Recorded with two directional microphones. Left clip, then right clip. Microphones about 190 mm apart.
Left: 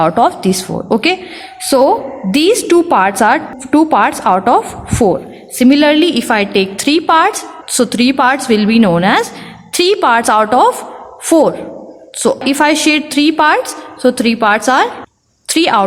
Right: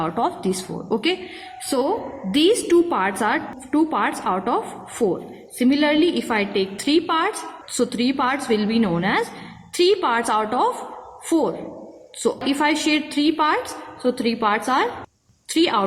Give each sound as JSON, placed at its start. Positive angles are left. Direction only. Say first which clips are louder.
{"t": 0.0, "sound": "a woman's voice", "louder": "left 12 dB", "side_deg": 35}